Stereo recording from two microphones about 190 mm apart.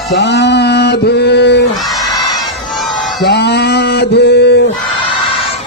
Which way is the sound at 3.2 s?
60° left (ahead or behind).